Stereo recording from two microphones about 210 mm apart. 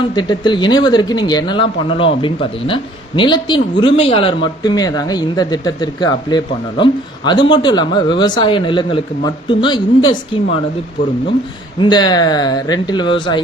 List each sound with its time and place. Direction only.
0.2 s speech: 20° left (ahead or behind)
11.8 s speech: 20° left (ahead or behind)